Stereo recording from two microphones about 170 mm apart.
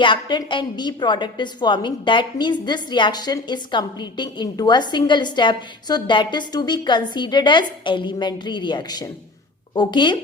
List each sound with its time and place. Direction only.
0.0 s a woman's voice: 30° left (ahead or behind)